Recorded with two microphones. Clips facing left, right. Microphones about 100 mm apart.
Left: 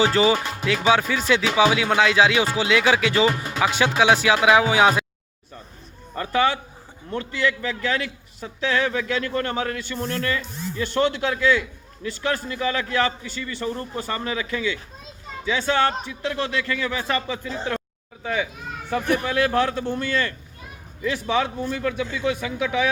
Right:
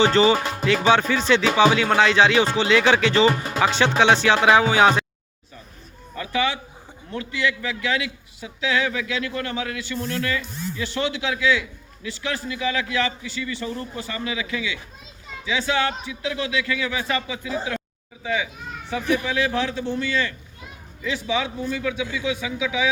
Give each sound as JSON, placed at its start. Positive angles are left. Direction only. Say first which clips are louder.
{"t": 0.0, "sound": "speech", "louder": "right 2 dB", "side_deg": 5}
{"t": 6.1, "sound": "a man's voice", "louder": "left 3 dB", "side_deg": 50}
{"t": 17.7, "sound": "a sound", "louder": "left 2 dB", "side_deg": 45}
{"t": 18.9, "sound": "a man's voice", "louder": "left 1 dB", "side_deg": 55}